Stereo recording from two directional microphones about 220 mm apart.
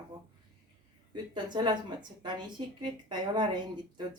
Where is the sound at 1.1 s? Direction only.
20° right (ahead or behind).